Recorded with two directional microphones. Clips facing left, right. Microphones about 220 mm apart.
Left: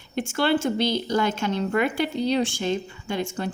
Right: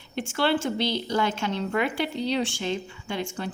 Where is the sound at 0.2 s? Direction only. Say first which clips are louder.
Left 2 dB; 45° left (ahead or behind).